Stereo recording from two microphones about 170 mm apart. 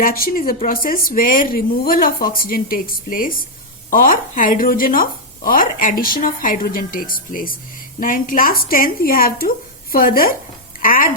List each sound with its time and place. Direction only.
0.0 s speech: 55° left (ahead or behind)